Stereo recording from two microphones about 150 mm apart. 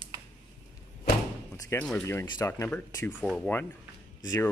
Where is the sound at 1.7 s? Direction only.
10° left (ahead or behind).